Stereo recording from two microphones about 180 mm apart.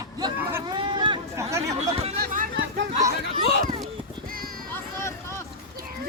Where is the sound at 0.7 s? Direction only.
25° right (ahead or behind).